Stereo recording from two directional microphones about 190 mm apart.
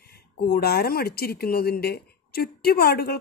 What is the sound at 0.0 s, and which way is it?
Speech, 55° left (ahead or behind).